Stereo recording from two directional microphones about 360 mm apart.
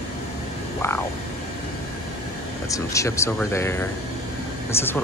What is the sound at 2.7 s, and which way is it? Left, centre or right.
Speech, centre.